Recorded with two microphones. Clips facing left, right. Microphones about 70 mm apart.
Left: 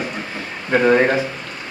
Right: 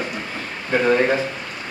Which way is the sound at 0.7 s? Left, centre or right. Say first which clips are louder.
Left 3 dB; centre.